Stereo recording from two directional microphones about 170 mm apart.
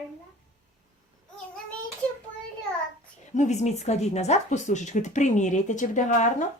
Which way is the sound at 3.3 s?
45° left (ahead or behind).